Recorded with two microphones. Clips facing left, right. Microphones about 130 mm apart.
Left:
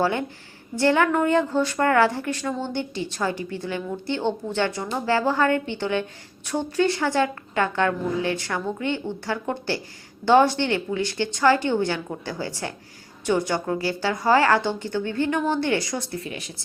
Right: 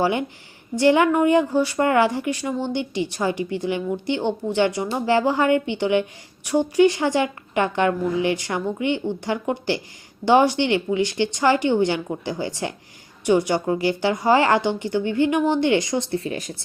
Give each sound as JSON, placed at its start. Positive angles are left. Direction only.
{"t": 0.0, "sound": "a woman's voice", "side_deg": -15}